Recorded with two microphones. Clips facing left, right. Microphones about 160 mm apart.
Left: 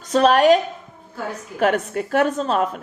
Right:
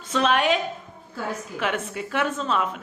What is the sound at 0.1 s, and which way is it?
A woman's voice, 40° left (ahead or behind).